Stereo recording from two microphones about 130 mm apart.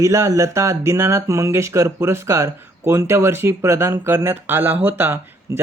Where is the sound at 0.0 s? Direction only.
25° right (ahead or behind).